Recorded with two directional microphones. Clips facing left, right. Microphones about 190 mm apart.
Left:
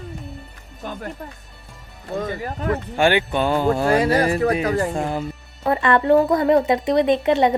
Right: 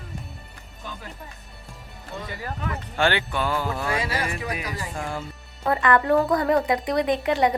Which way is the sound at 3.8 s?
35° left (ahead or behind).